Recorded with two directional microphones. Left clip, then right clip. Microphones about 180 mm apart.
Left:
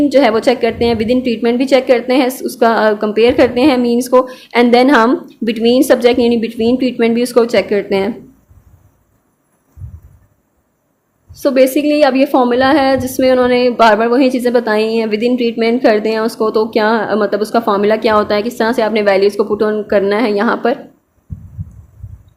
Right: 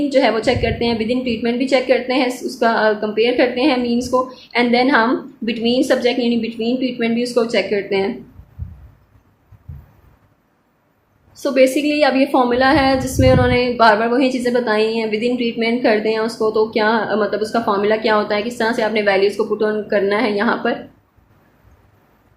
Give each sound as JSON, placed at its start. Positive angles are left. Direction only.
{"t": 0.1, "sound": "a woman's voice", "side_deg": 40}
{"t": 11.3, "sound": "a woman's voice", "side_deg": 30}